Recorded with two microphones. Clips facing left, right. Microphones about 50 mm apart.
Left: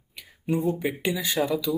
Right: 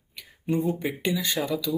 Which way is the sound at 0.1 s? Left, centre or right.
Centre.